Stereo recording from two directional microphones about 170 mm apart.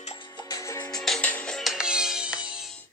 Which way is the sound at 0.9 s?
5° left (ahead or behind).